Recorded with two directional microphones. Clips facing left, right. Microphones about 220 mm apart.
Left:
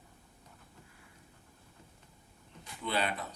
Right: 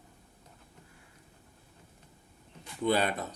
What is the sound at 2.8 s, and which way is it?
Speech, 45° right (ahead or behind).